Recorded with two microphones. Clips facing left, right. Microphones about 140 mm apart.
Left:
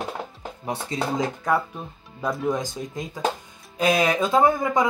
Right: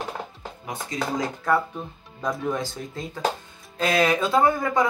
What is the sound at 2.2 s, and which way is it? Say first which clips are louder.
Speech: left 2 dB; 5° left (ahead or behind).